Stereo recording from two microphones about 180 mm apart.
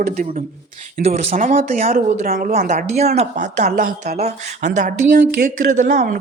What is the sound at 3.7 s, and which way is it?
Speech, 60° right (ahead or behind).